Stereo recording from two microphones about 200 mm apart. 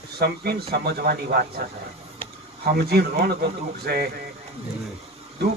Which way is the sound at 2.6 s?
50° right (ahead or behind).